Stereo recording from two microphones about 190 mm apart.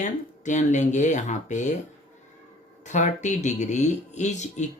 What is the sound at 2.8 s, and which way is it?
Speech, 40° left (ahead or behind).